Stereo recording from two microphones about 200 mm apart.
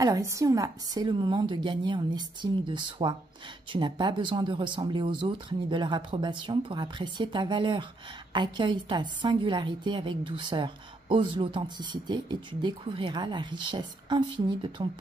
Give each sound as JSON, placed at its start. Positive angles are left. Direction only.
{"t": 0.0, "sound": "a woman's voice", "side_deg": -15}